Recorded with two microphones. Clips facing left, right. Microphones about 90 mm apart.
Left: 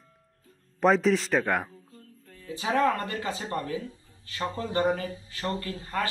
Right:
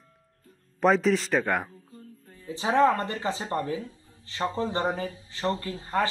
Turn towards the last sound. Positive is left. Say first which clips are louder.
# right 3 dB
turn(degrees=-25)  # may be behind; listen again after turning